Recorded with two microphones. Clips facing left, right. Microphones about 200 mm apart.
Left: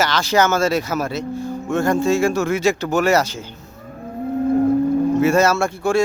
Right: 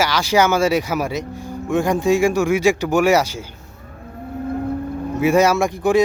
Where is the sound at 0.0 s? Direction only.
10° right (ahead or behind).